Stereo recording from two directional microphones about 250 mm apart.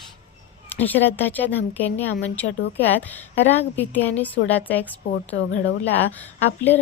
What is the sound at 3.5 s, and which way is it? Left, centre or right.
Speech, centre.